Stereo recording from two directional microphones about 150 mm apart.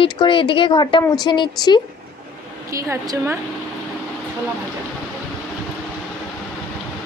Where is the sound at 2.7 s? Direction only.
25° right (ahead or behind).